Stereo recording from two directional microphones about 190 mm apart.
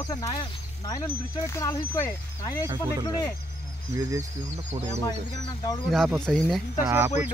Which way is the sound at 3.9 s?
15° right (ahead or behind).